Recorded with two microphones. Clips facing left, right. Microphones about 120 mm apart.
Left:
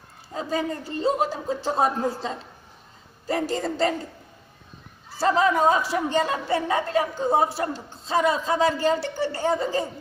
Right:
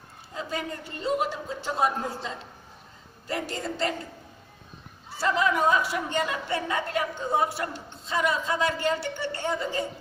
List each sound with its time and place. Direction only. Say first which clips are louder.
0.3 s a woman's voice: left 6 dB; 35° left (ahead or behind)
5.2 s a woman's voice: left 4 dB; 35° left (ahead or behind)